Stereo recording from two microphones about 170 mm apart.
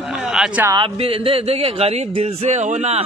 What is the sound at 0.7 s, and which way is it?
Speech, 30° right (ahead or behind).